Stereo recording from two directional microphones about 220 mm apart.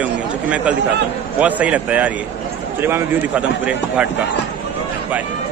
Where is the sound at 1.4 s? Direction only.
5° right (ahead or behind).